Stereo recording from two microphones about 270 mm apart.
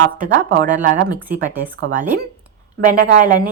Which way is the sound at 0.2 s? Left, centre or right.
Right.